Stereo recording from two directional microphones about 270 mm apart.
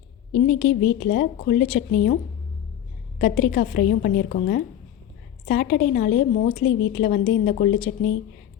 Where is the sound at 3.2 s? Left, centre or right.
Left.